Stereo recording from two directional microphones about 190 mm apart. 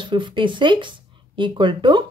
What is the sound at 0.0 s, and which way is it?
Speech, 25° right (ahead or behind).